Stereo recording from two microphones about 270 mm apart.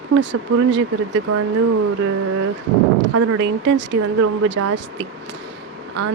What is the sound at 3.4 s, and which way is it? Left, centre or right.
Speech, right.